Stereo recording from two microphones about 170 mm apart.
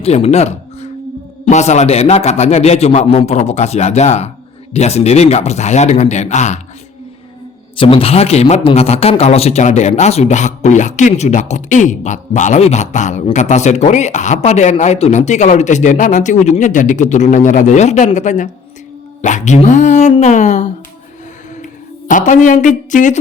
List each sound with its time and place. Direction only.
0.0 s a man's voice: 40° left (ahead or behind)
7.8 s a man's voice: 35° left (ahead or behind)
21.5 s a sound: 50° left (ahead or behind)